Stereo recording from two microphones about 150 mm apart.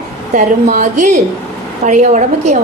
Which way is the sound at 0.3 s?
55° right (ahead or behind).